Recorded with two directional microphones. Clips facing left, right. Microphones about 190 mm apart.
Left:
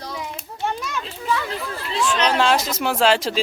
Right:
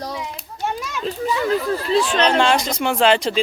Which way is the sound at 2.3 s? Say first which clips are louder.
Right 2 dB; centre (ahead or behind).